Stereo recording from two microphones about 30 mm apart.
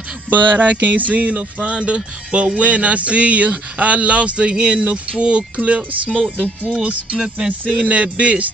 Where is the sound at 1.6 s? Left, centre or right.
Right.